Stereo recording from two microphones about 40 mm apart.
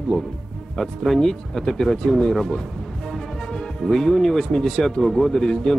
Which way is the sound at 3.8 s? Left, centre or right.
Centre.